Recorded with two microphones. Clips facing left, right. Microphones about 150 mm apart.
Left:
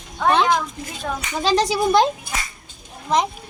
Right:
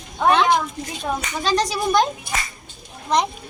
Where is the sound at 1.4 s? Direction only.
25° left (ahead or behind).